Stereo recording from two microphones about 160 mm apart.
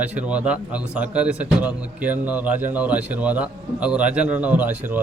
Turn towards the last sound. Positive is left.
turn(degrees=-10)  # may be behind; listen again after turning